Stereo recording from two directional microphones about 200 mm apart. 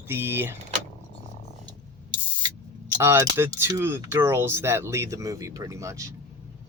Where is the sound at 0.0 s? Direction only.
10° right (ahead or behind).